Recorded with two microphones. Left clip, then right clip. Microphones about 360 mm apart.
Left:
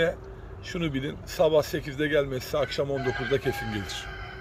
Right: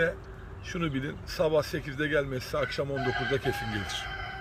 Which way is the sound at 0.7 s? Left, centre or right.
Centre.